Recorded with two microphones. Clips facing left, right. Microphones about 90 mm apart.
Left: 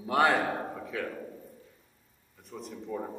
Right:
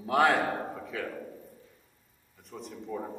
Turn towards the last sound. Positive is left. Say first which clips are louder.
# left 1 dB
turn(degrees=0)  # may be behind; listen again after turning